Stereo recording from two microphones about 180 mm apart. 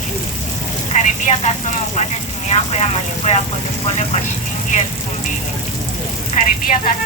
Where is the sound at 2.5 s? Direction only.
35° left (ahead or behind).